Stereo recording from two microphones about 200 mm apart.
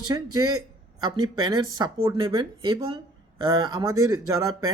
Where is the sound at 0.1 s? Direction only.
20° right (ahead or behind).